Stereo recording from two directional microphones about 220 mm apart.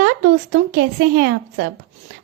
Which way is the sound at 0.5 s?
45° right (ahead or behind).